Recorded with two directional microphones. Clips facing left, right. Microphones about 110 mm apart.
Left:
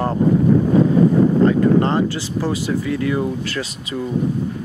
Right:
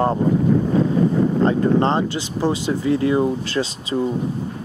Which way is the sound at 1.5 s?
25° right (ahead or behind).